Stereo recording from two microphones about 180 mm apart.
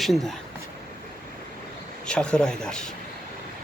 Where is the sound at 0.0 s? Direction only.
Centre (ahead or behind).